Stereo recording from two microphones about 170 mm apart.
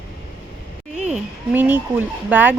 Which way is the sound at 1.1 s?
10° right (ahead or behind).